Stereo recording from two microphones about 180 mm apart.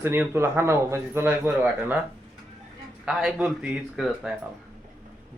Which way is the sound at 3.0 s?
5° right (ahead or behind).